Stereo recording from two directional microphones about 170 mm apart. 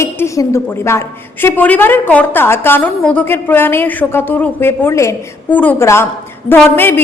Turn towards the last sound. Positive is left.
turn(degrees=10)  # may be behind; listen again after turning